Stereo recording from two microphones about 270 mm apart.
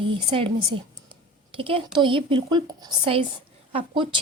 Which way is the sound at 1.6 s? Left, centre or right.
Centre.